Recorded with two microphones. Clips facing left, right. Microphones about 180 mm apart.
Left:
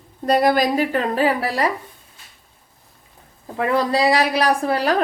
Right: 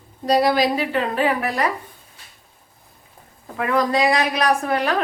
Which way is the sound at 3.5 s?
30° left (ahead or behind).